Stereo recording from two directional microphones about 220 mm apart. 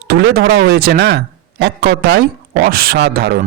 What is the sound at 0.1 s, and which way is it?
Speech, 45° right (ahead or behind).